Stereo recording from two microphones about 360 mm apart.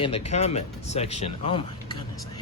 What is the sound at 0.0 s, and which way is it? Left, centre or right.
Speech, centre.